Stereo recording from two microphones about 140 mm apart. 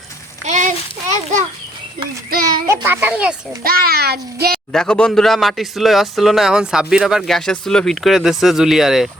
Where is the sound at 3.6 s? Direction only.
90° right.